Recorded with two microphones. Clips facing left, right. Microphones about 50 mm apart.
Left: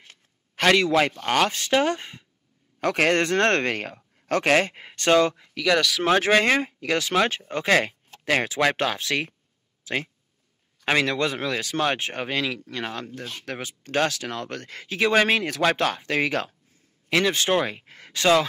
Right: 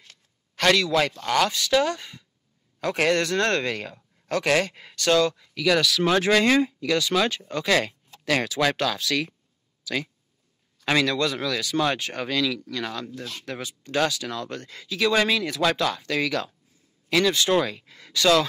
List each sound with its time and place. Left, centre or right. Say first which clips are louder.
0.7 s speech: left 2 dB; left
2.8 s speech: left 1 dB; left
5.6 s speech: even; centre
6.0 s speech: left 1 dB; left
17.8 s speech: even; left